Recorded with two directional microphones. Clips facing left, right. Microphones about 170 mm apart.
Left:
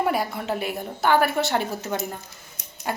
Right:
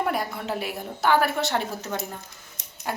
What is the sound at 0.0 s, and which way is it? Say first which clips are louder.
Speech: left 3 dB; 5° left (ahead or behind).